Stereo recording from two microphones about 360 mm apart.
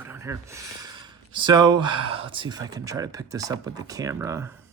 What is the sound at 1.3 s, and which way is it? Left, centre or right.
Speech, centre.